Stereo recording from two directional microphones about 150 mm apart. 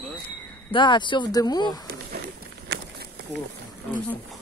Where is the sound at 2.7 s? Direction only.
90° right.